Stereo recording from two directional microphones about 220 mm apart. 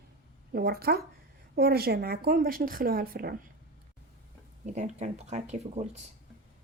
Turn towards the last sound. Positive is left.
turn(degrees=-30)  # may be behind; listen again after turning